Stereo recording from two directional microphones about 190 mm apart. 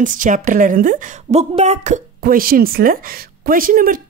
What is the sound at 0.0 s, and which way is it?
Speech, 45° right (ahead or behind).